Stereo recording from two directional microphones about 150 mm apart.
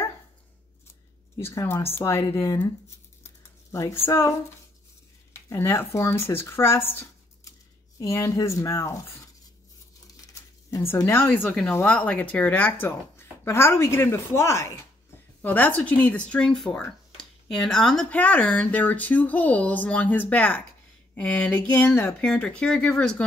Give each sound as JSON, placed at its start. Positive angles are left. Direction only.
{"t": 1.4, "sound": "speech", "side_deg": 20}
{"t": 3.3, "sound": "a sound", "side_deg": 20}
{"t": 5.3, "sound": "speech", "side_deg": 20}
{"t": 10.7, "sound": "speech", "side_deg": 20}